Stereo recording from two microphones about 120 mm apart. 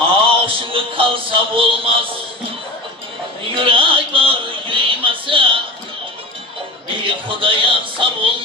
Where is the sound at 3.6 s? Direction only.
45° right (ahead or behind).